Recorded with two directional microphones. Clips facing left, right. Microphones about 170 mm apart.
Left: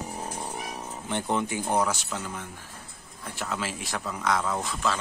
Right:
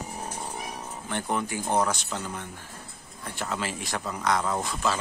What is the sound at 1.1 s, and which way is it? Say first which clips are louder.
Speech: left 2 dB; 20° left (ahead or behind).